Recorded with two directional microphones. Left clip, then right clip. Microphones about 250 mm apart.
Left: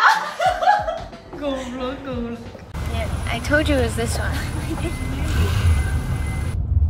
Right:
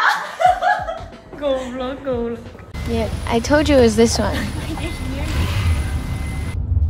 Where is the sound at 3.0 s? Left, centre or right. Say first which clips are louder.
Right 7 dB; right.